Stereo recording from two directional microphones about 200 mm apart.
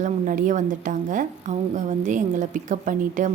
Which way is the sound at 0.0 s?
40° right (ahead or behind).